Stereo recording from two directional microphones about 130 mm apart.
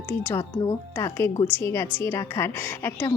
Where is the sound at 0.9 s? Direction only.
20° left (ahead or behind).